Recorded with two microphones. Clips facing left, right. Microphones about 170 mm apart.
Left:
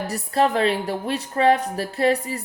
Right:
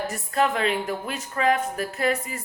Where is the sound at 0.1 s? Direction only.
35° left (ahead or behind).